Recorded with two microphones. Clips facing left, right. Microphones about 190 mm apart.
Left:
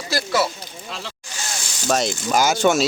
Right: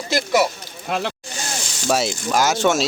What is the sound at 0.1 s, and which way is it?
Speech, 20° right (ahead or behind).